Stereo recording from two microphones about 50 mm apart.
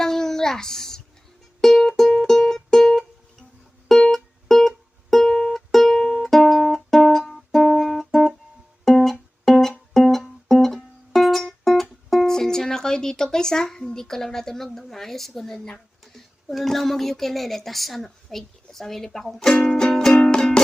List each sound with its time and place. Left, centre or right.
0.0 s a sound: centre
1.6 s music: centre
16.5 s a woman's voice: centre
19.5 s music: centre
19.9 s music: centre
20.1 s music: centre